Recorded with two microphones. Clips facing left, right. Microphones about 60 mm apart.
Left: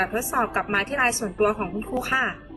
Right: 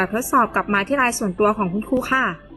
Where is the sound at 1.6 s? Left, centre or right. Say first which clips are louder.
Right 6 dB; centre.